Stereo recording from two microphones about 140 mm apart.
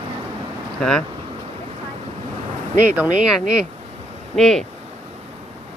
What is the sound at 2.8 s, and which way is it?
Speech, 10° right (ahead or behind).